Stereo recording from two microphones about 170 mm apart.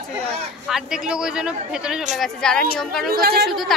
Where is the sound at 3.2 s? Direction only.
65° right (ahead or behind).